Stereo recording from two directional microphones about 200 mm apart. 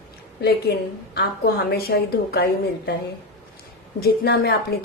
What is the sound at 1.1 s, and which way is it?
A woman's voice, 50° left (ahead or behind).